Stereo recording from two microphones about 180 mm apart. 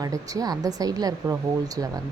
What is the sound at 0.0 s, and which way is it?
Speech, 20° right (ahead or behind).